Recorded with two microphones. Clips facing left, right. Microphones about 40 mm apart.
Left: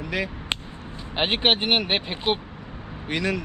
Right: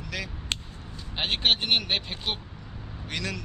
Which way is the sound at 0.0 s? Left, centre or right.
Left.